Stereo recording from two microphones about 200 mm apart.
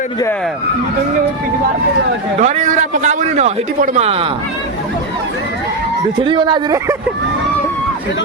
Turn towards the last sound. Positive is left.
turn(degrees=-20)  # may be behind; listen again after turning